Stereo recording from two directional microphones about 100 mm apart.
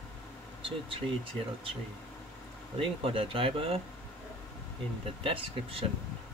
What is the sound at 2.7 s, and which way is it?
Speech, 65° right (ahead or behind).